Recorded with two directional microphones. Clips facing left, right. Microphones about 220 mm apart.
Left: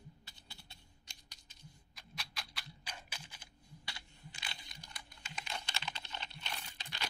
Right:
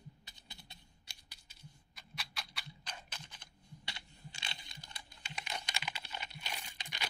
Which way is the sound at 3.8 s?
25° right (ahead or behind).